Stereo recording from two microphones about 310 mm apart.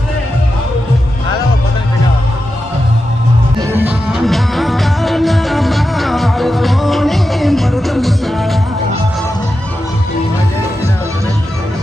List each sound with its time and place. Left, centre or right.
3.6 s music: centre